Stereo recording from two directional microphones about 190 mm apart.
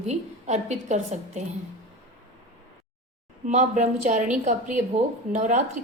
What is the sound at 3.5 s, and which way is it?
A woman's voice, 40° right (ahead or behind).